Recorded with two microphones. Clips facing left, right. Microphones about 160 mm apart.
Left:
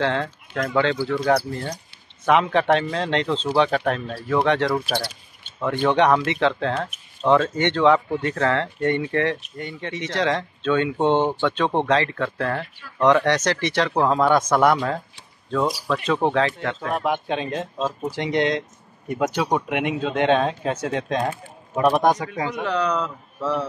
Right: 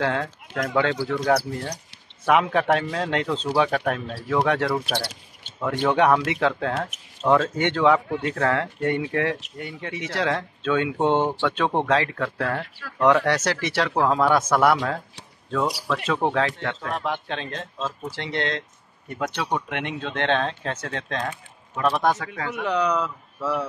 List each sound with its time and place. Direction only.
0.0 s speech: 5° right (ahead or behind)
16.0 s speech: centre (ahead or behind); by 22.7 s 15° left (ahead or behind)
22.7 s speech: 10° right (ahead or behind)